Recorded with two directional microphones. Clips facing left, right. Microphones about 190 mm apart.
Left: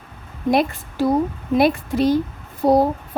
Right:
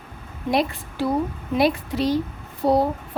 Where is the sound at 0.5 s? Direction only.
45° left (ahead or behind).